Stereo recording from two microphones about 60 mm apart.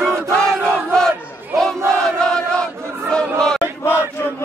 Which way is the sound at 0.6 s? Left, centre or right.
Centre.